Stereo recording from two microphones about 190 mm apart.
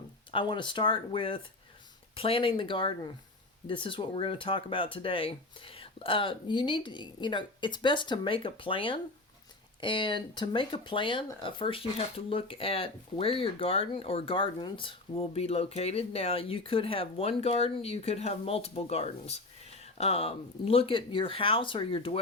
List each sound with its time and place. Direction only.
0.3 s speech: 25° left (ahead or behind)